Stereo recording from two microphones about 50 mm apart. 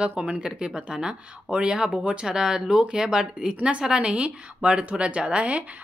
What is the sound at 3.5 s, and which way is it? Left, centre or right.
A woman's voice, right.